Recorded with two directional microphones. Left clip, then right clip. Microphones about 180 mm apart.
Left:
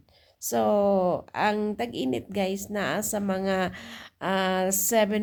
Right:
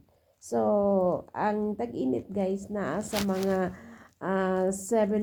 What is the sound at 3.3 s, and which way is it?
Speech, 35° left (ahead or behind).